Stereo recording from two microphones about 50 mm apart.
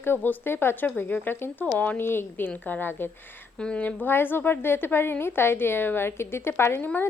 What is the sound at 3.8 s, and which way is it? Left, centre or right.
A woman's voice, left.